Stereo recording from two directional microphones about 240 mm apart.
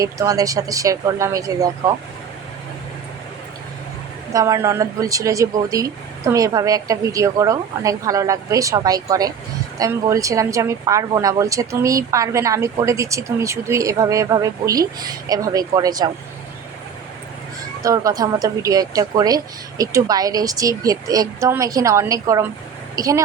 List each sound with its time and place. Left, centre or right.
0.0 s a woman's voice: centre
4.3 s a woman's voice: centre
17.8 s a woman's voice: centre